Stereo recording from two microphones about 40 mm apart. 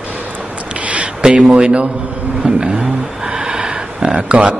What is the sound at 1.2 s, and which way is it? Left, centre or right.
A man's voice, centre.